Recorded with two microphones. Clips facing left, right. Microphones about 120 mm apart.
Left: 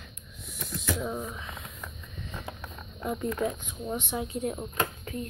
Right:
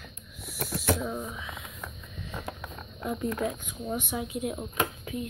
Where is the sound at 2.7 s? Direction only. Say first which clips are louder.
Left 1 dB; centre (ahead or behind).